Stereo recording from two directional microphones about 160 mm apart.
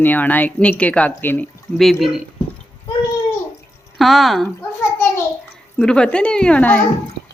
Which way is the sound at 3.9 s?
Centre (ahead or behind).